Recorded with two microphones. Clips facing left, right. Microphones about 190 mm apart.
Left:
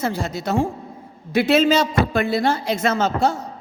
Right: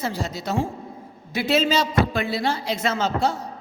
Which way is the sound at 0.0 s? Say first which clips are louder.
Left 4 dB; 50° left (ahead or behind).